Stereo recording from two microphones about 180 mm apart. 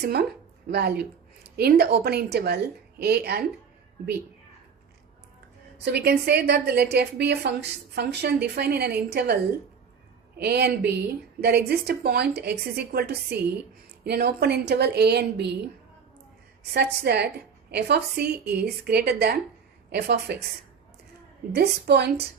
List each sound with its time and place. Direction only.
0.0 s a woman's voice: 60° right (ahead or behind)
5.8 s a woman's voice: 65° right (ahead or behind)
16.7 s a woman's voice: 65° right (ahead or behind)
21.5 s a woman's voice: 65° right (ahead or behind)